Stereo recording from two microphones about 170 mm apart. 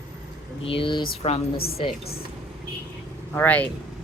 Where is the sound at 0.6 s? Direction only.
30° left (ahead or behind).